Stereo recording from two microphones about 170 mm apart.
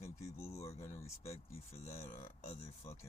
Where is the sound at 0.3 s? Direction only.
15° left (ahead or behind).